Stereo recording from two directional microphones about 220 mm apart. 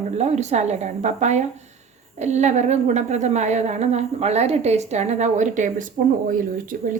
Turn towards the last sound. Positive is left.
turn(degrees=-40)  # may be behind; listen again after turning